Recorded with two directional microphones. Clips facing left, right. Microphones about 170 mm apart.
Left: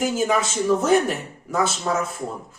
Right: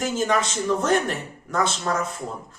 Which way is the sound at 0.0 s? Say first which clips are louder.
Left 2 dB; 5° left (ahead or behind).